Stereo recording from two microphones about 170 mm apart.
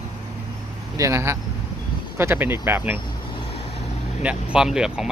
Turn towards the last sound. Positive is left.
turn(degrees=-5)  # may be behind; listen again after turning